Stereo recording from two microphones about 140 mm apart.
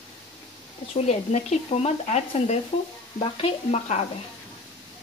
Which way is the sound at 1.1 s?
50° left (ahead or behind).